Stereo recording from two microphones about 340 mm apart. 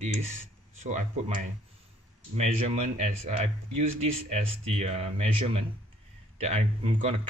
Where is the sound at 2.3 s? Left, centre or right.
Centre.